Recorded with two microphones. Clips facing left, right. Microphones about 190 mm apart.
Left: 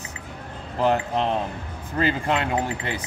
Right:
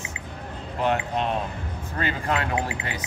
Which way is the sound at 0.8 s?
30° left (ahead or behind).